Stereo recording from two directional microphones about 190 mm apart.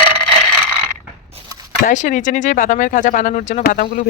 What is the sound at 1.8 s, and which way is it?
Speech, 40° left (ahead or behind).